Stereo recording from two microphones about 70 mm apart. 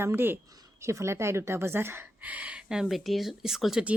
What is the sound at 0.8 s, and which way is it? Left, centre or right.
A woman's voice, right.